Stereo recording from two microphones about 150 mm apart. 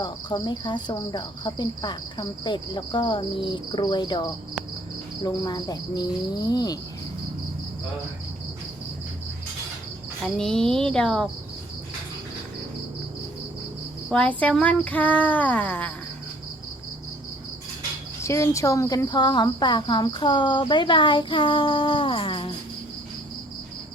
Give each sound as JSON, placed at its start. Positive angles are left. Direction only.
{"t": 0.0, "sound": "speech", "side_deg": 30}
{"t": 10.2, "sound": "speech", "side_deg": 5}
{"t": 14.1, "sound": "speech", "side_deg": 10}
{"t": 18.2, "sound": "speech", "side_deg": 20}